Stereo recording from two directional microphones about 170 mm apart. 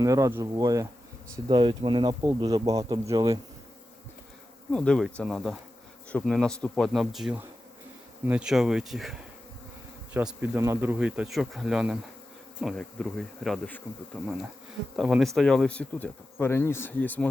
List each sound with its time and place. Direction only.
0.0 s speech: 20° right (ahead or behind)
4.7 s speech: 5° left (ahead or behind)